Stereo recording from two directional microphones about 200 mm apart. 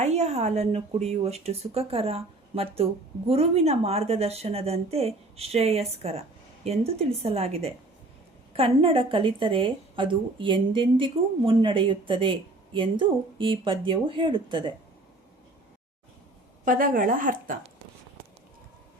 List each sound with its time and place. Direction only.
0.0 s a woman's voice: 35° right (ahead or behind)
16.6 s a woman's voice: 45° right (ahead or behind)